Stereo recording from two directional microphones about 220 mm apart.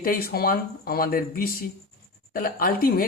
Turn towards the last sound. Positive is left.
turn(degrees=40)  # may be behind; listen again after turning